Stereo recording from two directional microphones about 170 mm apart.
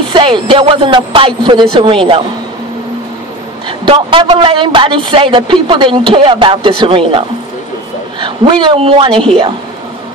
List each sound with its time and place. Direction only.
0.1 s a man's voice: 30° right (ahead or behind)
3.6 s a man's voice: 30° right (ahead or behind)